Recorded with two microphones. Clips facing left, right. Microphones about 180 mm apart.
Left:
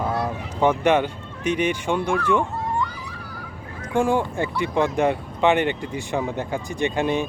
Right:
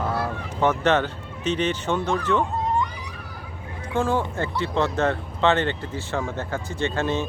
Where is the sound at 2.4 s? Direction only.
20° right (ahead or behind).